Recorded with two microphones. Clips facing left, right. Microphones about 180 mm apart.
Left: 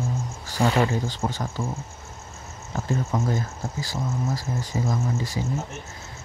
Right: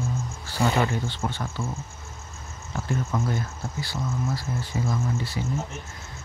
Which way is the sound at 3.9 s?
40° left (ahead or behind).